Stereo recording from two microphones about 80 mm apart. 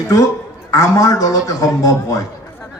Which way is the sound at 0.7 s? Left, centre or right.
Left.